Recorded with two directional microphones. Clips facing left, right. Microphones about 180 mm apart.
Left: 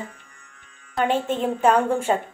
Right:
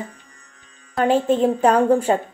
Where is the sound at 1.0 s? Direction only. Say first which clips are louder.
Right 6 dB; 40° right (ahead or behind).